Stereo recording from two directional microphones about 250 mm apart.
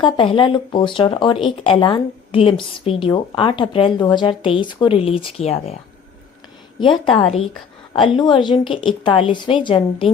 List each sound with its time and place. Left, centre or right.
0.0 s speech: centre
7.0 s speech: left